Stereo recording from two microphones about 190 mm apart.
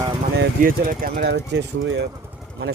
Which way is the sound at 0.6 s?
50° right (ahead or behind).